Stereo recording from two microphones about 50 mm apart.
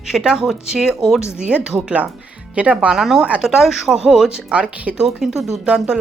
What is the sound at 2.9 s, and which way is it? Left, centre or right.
Speech, centre.